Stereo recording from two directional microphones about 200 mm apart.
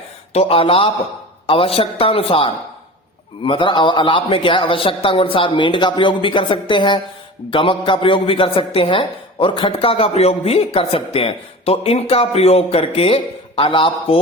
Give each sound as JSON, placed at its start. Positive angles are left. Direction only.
{"t": 0.3, "sound": "a man's voice", "side_deg": 30}